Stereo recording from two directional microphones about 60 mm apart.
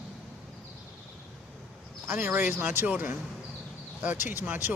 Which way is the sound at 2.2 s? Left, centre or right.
Right.